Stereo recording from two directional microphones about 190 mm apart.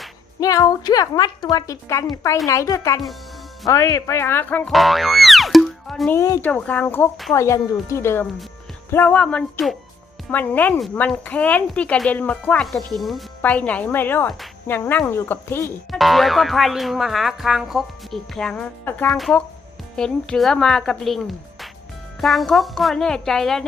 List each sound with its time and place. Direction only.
0.3 s a woman's voice: 20° left (ahead or behind); by 6.1 s centre (ahead or behind)
6.1 s a woman's voice: 15° left (ahead or behind)
15.9 s speech: centre (ahead or behind)